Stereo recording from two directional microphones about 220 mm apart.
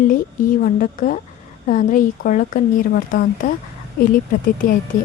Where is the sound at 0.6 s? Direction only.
40° left (ahead or behind).